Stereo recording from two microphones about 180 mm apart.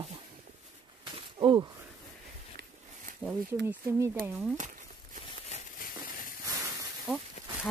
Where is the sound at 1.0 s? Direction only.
25° right (ahead or behind).